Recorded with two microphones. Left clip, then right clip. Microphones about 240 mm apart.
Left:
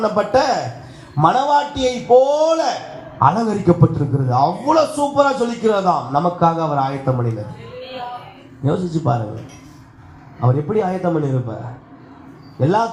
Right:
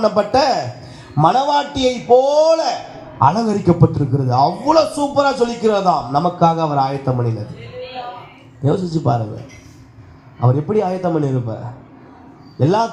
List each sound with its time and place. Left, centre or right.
0.0 s a man's voice: right
8.6 s a man's voice: right
10.4 s a man's voice: right
12.5 s a man's voice: right